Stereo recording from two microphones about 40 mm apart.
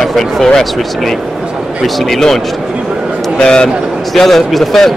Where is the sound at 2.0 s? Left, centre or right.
Centre.